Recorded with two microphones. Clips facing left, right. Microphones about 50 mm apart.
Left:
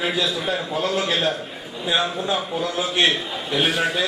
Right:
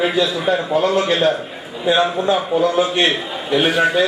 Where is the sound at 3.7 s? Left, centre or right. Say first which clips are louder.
Right 6 dB; centre.